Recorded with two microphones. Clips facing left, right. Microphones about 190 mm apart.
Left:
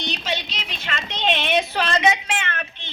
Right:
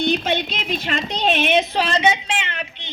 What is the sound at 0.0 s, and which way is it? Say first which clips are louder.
Speech: right 8 dB; 55° right (ahead or behind).